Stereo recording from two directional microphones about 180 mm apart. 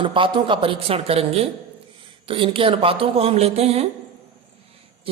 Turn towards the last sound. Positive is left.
turn(degrees=-35)  # may be behind; listen again after turning